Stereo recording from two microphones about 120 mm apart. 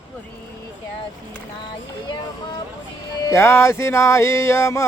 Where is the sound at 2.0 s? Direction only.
40° left (ahead or behind).